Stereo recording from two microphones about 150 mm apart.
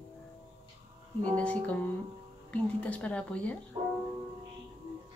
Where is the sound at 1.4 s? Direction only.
10° left (ahead or behind).